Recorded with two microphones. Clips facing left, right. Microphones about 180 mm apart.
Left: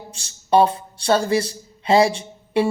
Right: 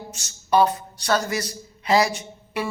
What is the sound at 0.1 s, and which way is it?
A man's voice, 30° left (ahead or behind).